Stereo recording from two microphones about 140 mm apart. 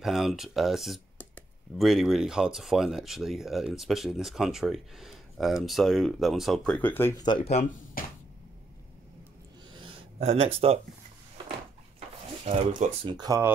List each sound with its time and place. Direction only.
0.0 s speech: centre (ahead or behind); by 7.2 s 15° left (ahead or behind)
7.2 s speech: 30° left (ahead or behind)
8.0 s a sound: 90° left
9.8 s a sound: 40° right (ahead or behind)
12.4 s speech: 45° right (ahead or behind)
13.1 s speech: 30° right (ahead or behind)